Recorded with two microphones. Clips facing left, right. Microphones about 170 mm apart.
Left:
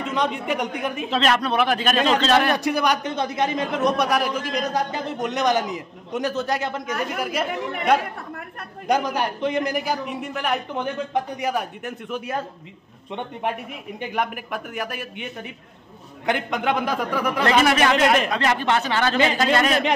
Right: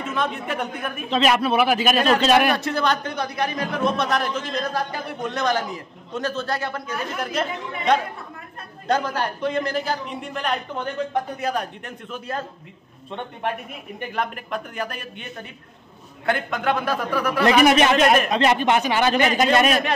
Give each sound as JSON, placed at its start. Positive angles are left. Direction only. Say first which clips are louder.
{"t": 0.1, "sound": "a man's voice", "louder": "left 2 dB", "side_deg": 15}
{"t": 1.1, "sound": "a man's voice", "louder": "right 2 dB", "side_deg": -5}
{"t": 2.5, "sound": "a man's voice", "louder": "left 1 dB", "side_deg": 15}
{"t": 3.1, "sound": "a man's voice", "louder": "left 2 dB", "side_deg": 25}
{"t": 17.5, "sound": "a man's voice", "louder": "right 3 dB", "side_deg": -20}